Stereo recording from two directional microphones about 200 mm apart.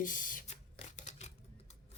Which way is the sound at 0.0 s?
40° left (ahead or behind).